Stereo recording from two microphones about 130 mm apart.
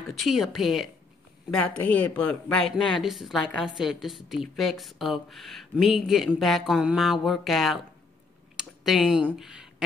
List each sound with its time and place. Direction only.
0.1 s a woman's voice: centre (ahead or behind)
2.7 s a woman's voice: centre (ahead or behind)